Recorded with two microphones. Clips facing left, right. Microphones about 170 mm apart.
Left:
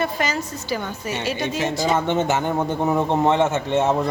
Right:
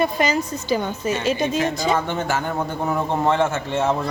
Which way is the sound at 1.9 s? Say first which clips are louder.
Left 2 dB; 20° left (ahead or behind).